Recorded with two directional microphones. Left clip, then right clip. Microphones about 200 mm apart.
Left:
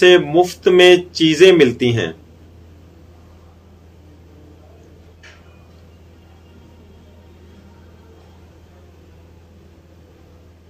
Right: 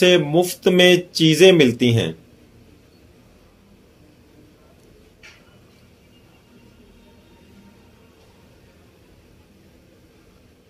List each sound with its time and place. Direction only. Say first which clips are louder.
0.0 s speech: left 5 dB; 45° right (ahead or behind)